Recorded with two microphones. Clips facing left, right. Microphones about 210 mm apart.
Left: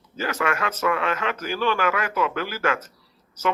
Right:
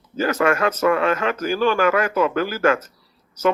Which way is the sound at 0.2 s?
45° right (ahead or behind).